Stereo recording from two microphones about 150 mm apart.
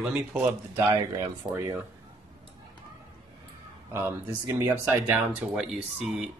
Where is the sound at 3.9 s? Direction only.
15° right (ahead or behind).